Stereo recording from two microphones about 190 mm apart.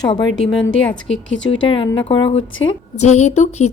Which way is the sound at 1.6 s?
30° left (ahead or behind).